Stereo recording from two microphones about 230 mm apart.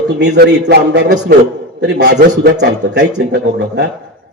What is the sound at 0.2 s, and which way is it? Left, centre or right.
A man's voice, right.